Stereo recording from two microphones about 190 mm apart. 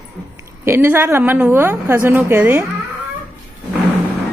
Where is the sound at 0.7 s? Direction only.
10° right (ahead or behind).